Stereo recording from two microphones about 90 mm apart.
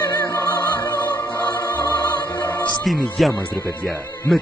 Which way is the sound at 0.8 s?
25° left (ahead or behind).